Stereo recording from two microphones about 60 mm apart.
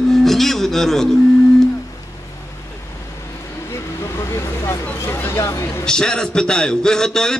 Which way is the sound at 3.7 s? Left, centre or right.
Left.